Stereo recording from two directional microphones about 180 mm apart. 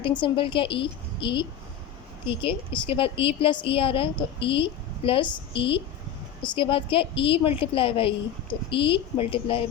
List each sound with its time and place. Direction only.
0.0 s a woman's voice: 25° left (ahead or behind)